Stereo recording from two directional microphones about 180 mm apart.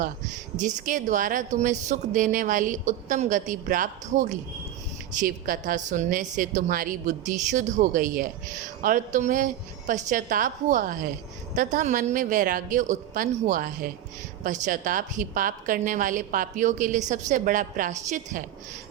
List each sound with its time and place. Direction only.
0.5 s a woman's voice: 45° right (ahead or behind)